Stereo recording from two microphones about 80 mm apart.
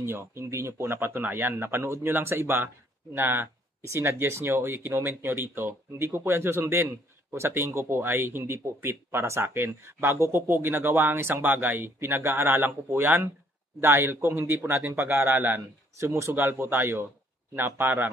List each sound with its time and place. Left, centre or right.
0.0 s speech: right
16.0 s speech: right